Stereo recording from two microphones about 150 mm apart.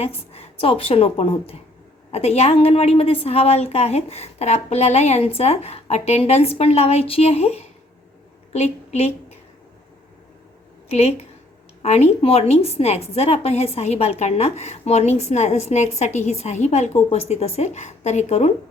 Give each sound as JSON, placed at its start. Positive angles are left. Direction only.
{"t": 0.0, "sound": "a woman's voice", "side_deg": 45}
{"t": 10.8, "sound": "a woman's voice", "side_deg": 45}